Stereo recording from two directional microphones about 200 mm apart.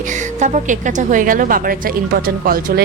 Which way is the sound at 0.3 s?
35° right (ahead or behind).